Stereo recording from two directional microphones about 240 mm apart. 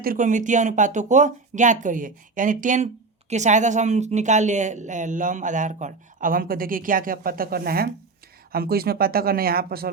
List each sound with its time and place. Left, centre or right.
0.0 s speech: right